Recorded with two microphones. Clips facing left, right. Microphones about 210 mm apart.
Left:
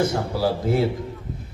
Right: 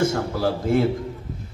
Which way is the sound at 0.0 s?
50° right (ahead or behind).